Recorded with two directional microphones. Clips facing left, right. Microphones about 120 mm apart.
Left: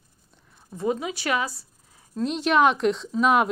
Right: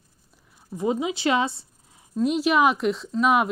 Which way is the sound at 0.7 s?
20° right (ahead or behind).